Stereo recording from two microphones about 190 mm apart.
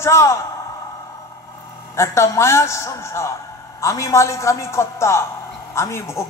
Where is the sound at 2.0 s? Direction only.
15° left (ahead or behind).